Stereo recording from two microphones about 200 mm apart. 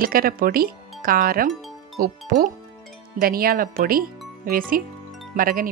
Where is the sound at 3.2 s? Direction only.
50° right (ahead or behind).